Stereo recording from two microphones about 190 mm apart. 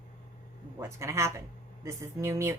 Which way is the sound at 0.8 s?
15° right (ahead or behind).